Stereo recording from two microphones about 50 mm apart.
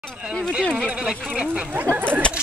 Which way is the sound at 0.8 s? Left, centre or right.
Centre.